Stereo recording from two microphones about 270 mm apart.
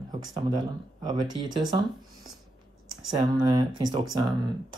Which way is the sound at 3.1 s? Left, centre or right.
Centre.